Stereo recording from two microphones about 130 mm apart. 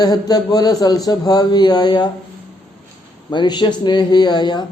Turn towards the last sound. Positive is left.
turn(degrees=35)  # may be behind; listen again after turning